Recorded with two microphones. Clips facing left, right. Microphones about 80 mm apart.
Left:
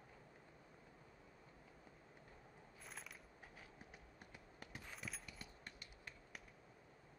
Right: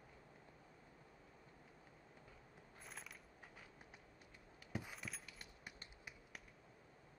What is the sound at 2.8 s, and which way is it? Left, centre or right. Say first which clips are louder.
Coin: even; centre.